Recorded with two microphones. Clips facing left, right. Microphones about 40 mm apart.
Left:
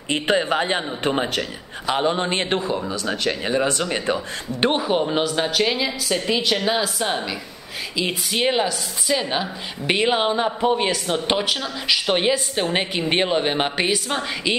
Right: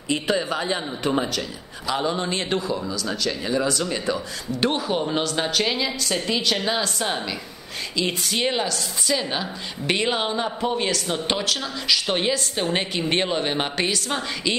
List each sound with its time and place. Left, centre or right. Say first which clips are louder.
0.1 s speech: left 3 dB; left
4.6 s a woman's voice: left 4 dB; left